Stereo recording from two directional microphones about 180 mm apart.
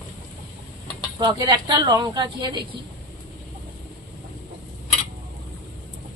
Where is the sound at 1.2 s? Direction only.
20° right (ahead or behind).